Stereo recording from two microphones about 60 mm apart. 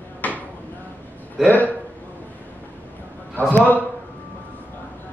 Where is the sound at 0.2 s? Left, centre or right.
Left.